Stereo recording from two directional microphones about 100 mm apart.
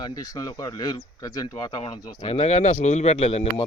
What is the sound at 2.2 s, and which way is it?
Speech, 90° left.